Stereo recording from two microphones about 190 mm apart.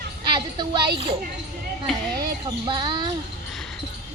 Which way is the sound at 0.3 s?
25° right (ahead or behind).